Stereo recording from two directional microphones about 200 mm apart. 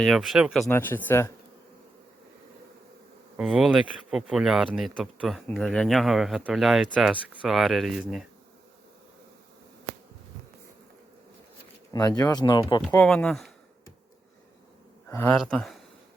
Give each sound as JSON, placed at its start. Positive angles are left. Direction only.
{"t": 0.0, "sound": "speech", "side_deg": 0}
{"t": 0.6, "sound": "speech", "side_deg": 10}
{"t": 3.3, "sound": "speech", "side_deg": -5}
{"t": 11.9, "sound": "speech", "side_deg": 20}
{"t": 12.9, "sound": "speech", "side_deg": 5}
{"t": 15.4, "sound": "speech", "side_deg": 0}